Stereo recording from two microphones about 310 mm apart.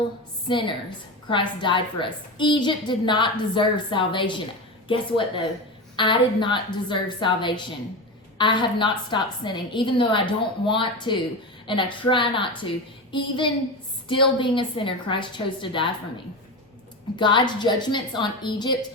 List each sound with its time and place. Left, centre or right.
0.4 s a woman's voice: centre
17.2 s a woman's voice: centre